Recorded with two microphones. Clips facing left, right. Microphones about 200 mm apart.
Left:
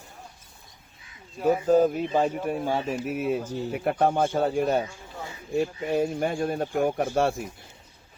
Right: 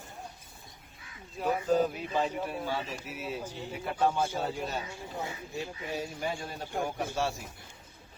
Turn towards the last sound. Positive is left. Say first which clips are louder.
# left 8 dB
turn(degrees=55)  # may be behind; listen again after turning